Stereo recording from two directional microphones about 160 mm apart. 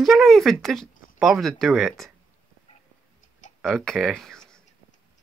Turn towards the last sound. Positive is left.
turn(degrees=5)  # may be behind; listen again after turning